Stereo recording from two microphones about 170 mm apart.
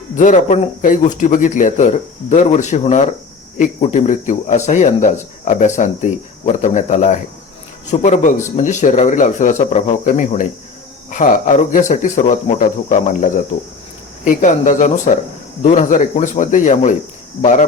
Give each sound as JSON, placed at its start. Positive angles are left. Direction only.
{"t": 0.2, "sound": "speech", "side_deg": 45}